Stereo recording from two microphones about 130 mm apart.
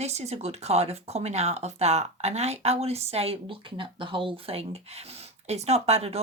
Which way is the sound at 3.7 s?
40° right (ahead or behind).